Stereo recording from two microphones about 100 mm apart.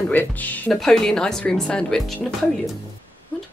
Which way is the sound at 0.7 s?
5° left (ahead or behind).